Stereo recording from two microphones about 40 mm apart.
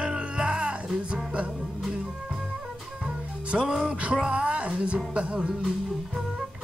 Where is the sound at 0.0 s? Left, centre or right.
Right.